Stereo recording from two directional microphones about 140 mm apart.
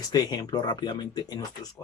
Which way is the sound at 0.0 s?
25° left (ahead or behind).